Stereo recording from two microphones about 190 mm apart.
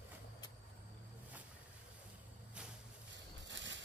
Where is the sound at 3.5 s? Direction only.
70° right (ahead or behind).